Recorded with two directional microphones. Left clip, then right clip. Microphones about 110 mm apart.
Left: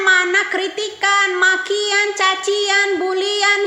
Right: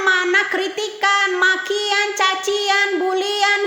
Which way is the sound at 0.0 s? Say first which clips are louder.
Left 2 dB; 40° right (ahead or behind).